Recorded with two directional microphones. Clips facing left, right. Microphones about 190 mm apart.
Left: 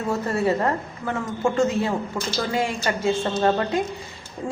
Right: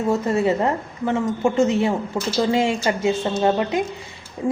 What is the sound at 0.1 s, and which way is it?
A woman's voice, 20° right (ahead or behind).